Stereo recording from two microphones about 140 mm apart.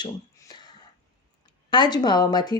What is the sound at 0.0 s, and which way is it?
Finger snapping, 30° left (ahead or behind).